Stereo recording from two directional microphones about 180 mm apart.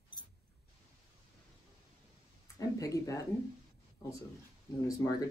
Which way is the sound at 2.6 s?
20° left (ahead or behind).